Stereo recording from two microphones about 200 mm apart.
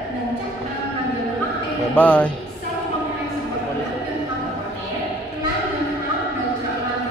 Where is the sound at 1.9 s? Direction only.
10° left (ahead or behind).